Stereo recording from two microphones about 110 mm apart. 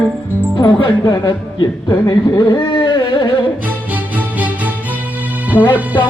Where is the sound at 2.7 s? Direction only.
45° left (ahead or behind).